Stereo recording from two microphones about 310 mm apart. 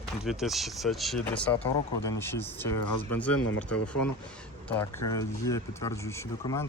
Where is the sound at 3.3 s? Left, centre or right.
Left.